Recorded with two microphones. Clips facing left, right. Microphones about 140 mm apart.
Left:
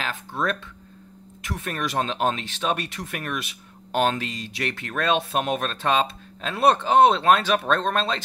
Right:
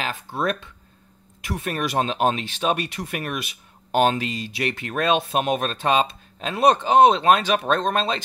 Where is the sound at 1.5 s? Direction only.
15° right (ahead or behind).